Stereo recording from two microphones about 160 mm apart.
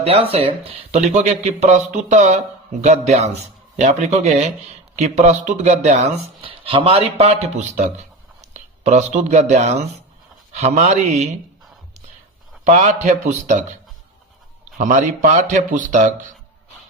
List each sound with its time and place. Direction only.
0.0 s speech: 35° right (ahead or behind)
6.4 s speech: 35° right (ahead or behind)
12.6 s speech: 45° right (ahead or behind)